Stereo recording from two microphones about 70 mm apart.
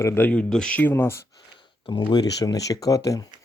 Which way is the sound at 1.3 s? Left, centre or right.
Left.